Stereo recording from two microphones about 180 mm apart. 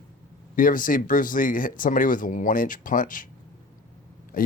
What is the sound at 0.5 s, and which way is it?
Speech, 50° left (ahead or behind).